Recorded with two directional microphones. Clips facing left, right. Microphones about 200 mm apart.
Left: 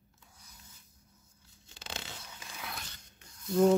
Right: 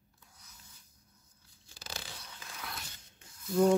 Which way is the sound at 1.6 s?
20° left (ahead or behind).